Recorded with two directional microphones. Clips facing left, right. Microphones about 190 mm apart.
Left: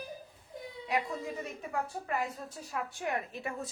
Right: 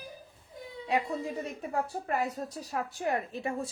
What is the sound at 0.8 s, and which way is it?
Speech, 30° right (ahead or behind).